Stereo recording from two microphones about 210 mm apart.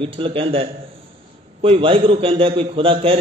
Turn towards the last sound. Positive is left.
turn(degrees=-25)  # may be behind; listen again after turning